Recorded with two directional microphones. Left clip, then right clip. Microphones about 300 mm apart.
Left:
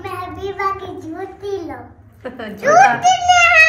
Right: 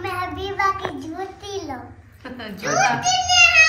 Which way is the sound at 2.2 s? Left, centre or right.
Centre.